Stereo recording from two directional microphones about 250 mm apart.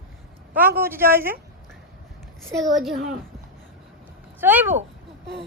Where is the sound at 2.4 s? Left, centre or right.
Centre.